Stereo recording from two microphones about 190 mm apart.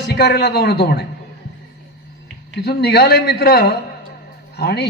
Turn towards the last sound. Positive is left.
turn(degrees=60)  # may be behind; listen again after turning